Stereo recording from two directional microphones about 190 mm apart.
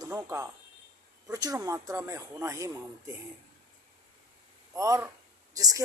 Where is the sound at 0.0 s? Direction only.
15° right (ahead or behind).